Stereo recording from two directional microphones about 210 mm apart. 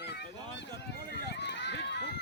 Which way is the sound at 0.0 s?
50° left (ahead or behind).